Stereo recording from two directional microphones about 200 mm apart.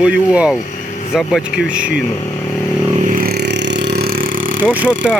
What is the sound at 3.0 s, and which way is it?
Vehicle, 45° right (ahead or behind).